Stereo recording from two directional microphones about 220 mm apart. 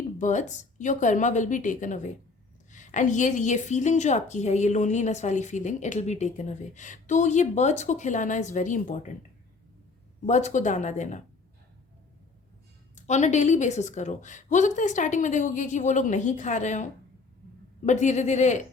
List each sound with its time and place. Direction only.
0.2 s a woman's voice: 35° left (ahead or behind)
10.2 s a woman's voice: 35° left (ahead or behind)
13.0 s a woman's voice: 30° left (ahead or behind)